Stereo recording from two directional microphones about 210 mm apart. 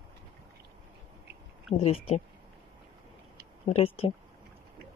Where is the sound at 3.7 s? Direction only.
30° left (ahead or behind).